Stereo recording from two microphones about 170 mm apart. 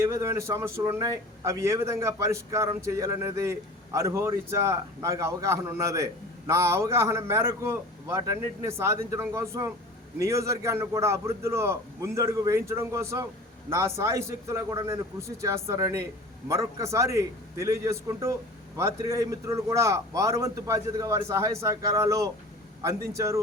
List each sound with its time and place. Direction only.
0.0 s a man's voice: 15° right (ahead or behind)